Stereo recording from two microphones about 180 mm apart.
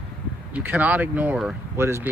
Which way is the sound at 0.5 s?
10° right (ahead or behind).